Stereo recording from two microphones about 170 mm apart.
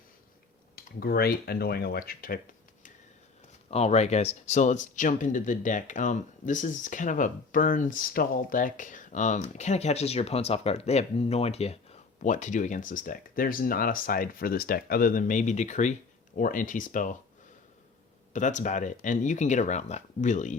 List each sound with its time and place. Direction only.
0.9 s speech: 65° left (ahead or behind)
3.7 s speech: 40° left (ahead or behind)
18.3 s speech: 45° left (ahead or behind)